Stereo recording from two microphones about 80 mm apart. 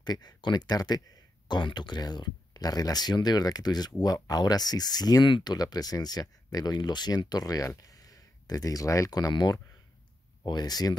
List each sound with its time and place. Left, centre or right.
0.0 s speech: left
5.2 s speech: left
10.4 s speech: left